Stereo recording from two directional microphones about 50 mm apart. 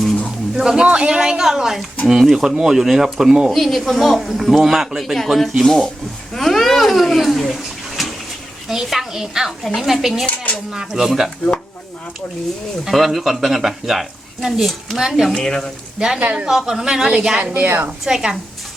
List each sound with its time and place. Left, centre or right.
0.5 s speech: centre
6.3 s a sound: centre
8.7 s a child's voice: centre
9.6 s speech: centre
10.2 s a sound: left
10.7 s speech: centre
12.8 s speech: centre
15.4 s speech: centre
16.0 s speech: centre
16.2 s speech: right
16.5 s speech: centre
17.5 s a woman's voice: right
18.0 s speech: centre